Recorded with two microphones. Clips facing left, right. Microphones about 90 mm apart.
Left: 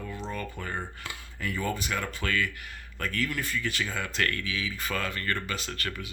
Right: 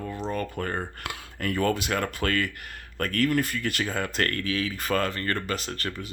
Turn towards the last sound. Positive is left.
turn(degrees=-40)  # may be behind; listen again after turning